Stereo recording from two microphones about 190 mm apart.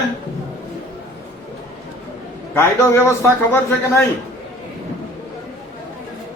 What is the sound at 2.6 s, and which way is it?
Speech, 15° left (ahead or behind).